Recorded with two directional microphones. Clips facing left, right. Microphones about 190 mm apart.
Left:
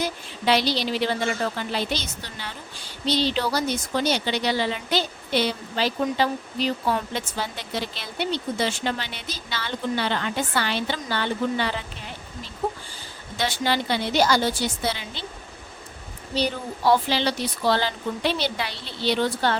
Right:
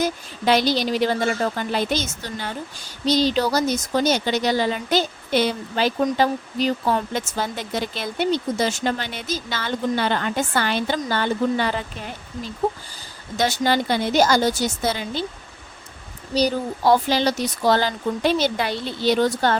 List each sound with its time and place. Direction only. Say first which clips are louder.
0.0 s a woman's voice: right 4 dB; 45° right (ahead or behind)
13.3 s a woman's voice: right 4 dB; 45° right (ahead or behind)
16.3 s a woman's voice: right 5 dB; 40° right (ahead or behind)